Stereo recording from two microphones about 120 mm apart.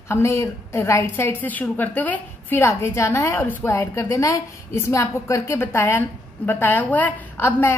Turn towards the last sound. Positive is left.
turn(degrees=15)  # may be behind; listen again after turning